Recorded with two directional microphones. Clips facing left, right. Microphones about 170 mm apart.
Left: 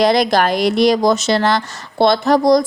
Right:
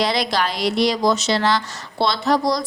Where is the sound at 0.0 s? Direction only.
50° left (ahead or behind).